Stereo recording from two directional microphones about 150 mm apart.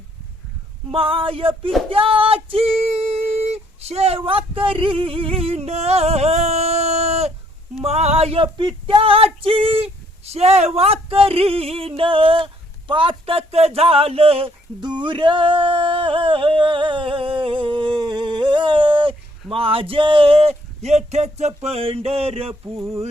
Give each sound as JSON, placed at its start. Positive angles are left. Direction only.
{"t": 0.9, "sound": "female singing", "side_deg": -35}
{"t": 1.9, "sound": "a sound", "side_deg": -35}
{"t": 7.8, "sound": "female singing", "side_deg": -45}
{"t": 12.9, "sound": "speech", "side_deg": -35}